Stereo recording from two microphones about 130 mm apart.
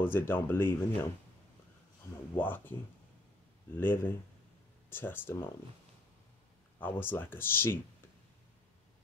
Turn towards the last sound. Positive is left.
turn(degrees=15)  # may be behind; listen again after turning